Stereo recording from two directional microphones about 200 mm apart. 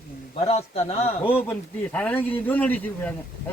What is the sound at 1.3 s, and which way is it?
A man's voice, 5° left (ahead or behind).